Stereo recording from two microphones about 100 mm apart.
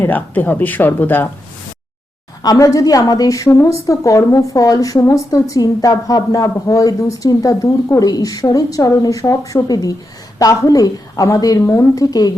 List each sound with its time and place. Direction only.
0.0 s speech: 20° left (ahead or behind)
2.4 s a woman's voice: 35° left (ahead or behind)